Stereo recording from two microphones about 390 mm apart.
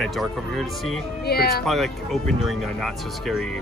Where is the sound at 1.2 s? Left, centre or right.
Left.